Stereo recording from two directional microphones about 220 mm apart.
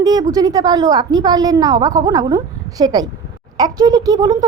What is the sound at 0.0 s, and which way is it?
A woman's voice, 15° right (ahead or behind).